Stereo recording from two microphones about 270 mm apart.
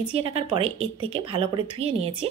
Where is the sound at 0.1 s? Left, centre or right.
Right.